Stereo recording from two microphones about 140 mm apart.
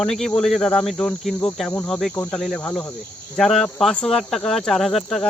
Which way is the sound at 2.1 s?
15° left (ahead or behind).